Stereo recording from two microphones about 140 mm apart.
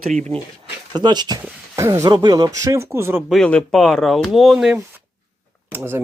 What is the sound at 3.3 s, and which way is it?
Speech, 5° left (ahead or behind).